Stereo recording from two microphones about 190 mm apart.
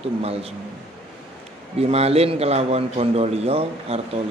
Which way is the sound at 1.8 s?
30° right (ahead or behind).